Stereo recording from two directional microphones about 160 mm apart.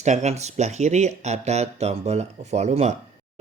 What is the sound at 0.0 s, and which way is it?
Speech, 45° right (ahead or behind).